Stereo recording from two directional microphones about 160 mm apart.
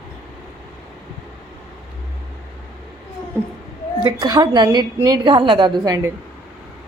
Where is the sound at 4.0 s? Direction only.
25° right (ahead or behind).